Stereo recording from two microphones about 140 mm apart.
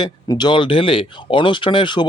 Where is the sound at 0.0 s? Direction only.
30° left (ahead or behind).